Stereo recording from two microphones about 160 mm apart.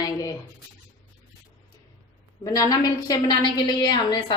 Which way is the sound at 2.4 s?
20° left (ahead or behind).